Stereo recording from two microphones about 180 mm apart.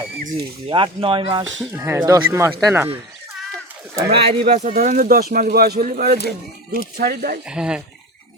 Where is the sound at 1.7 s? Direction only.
15° right (ahead or behind).